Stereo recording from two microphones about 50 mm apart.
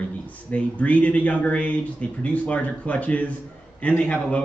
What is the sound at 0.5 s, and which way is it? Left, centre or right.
Speech, left.